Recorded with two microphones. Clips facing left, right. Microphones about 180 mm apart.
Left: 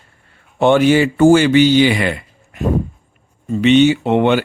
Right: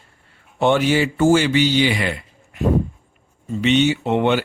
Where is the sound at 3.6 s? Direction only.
60° left (ahead or behind).